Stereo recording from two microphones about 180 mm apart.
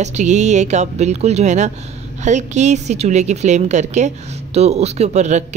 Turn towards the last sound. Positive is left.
turn(degrees=-40)  # may be behind; listen again after turning